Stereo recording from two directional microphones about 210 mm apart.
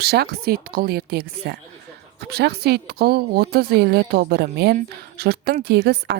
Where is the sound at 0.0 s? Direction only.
50° right (ahead or behind).